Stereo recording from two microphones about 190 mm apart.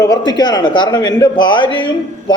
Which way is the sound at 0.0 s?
20° left (ahead or behind).